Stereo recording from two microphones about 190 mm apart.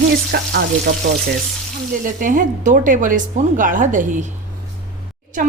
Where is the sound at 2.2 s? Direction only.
45° right (ahead or behind).